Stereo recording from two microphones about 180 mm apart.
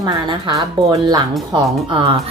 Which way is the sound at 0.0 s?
25° right (ahead or behind).